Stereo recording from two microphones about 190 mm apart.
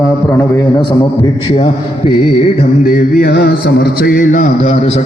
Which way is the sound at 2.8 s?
50° left (ahead or behind).